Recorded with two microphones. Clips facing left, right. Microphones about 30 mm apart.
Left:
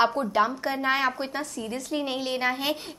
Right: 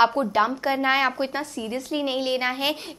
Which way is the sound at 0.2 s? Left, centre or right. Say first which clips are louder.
Right 2 dB; centre.